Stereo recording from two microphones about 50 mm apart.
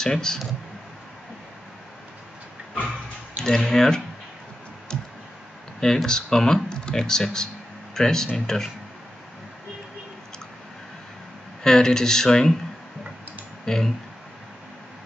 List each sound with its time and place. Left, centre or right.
0.0 s speech: centre
3.3 s speech: centre
4.9 s clicking: centre
5.8 s speech: centre
11.6 s speech: centre
13.7 s speech: centre